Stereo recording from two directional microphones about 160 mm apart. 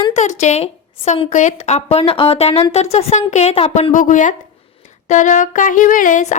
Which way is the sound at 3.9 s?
55° left (ahead or behind).